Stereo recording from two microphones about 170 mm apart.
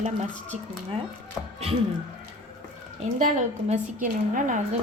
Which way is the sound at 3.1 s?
45° right (ahead or behind).